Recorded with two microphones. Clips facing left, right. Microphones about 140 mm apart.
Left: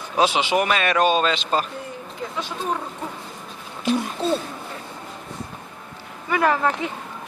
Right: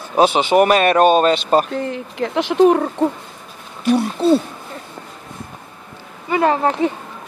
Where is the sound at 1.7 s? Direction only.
80° right.